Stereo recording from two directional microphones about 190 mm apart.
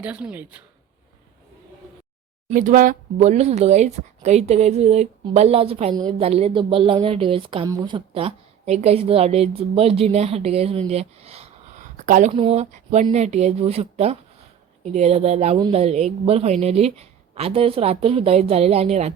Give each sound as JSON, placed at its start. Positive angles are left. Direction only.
{"t": 0.0, "sound": "speech", "side_deg": -5}
{"t": 2.5, "sound": "a woman's voice", "side_deg": -45}
{"t": 12.3, "sound": "a woman's voice", "side_deg": -30}
{"t": 15.5, "sound": "speech", "side_deg": -20}
{"t": 15.8, "sound": "a woman's voice", "side_deg": -35}